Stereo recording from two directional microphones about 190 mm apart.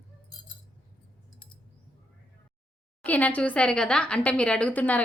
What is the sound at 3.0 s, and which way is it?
A woman's voice, 10° left (ahead or behind).